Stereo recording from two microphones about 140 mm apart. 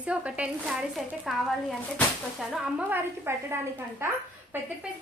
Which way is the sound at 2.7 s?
15° right (ahead or behind).